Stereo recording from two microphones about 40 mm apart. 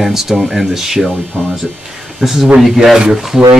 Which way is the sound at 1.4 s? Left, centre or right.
Right.